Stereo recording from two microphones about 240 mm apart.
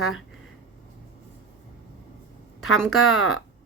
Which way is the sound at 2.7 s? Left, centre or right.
Centre.